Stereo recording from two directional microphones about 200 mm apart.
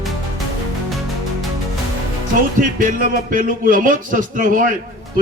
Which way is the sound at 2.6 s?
40° right (ahead or behind).